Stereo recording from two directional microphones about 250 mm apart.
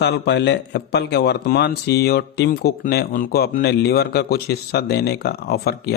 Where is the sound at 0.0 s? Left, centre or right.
Left.